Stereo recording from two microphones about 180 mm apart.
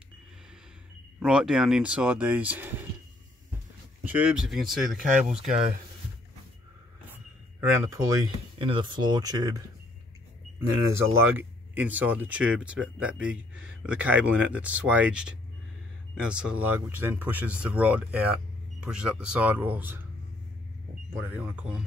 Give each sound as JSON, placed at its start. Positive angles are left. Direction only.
{"t": 1.2, "sound": "speech", "side_deg": -5}
{"t": 4.0, "sound": "speech", "side_deg": -10}
{"t": 7.7, "sound": "speech", "side_deg": -15}
{"t": 10.9, "sound": "speech", "side_deg": -10}
{"t": 21.1, "sound": "speech", "side_deg": -10}